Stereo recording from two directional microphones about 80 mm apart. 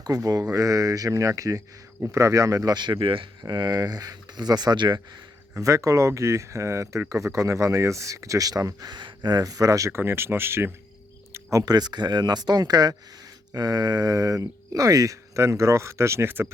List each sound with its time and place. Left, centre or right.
0.0 s speech: right
5.5 s speech: right
10.0 s speech: right
11.3 s a sound: right
11.6 s speech: right